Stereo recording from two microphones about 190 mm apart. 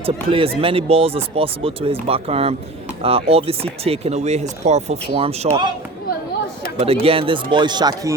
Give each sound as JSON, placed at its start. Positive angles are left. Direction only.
{"t": 0.0, "sound": "speech", "side_deg": -30}
{"t": 6.7, "sound": "speech", "side_deg": -30}